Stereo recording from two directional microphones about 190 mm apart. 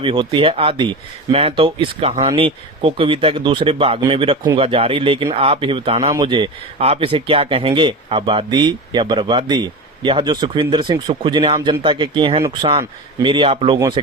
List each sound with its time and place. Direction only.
0.0 s speech: 25° right (ahead or behind)
13.7 s speech: 15° right (ahead or behind)